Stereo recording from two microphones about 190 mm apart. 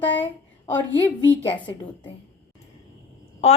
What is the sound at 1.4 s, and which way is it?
Speech, 25° left (ahead or behind).